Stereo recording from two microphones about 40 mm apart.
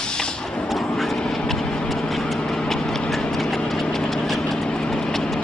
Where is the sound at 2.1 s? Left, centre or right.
Centre.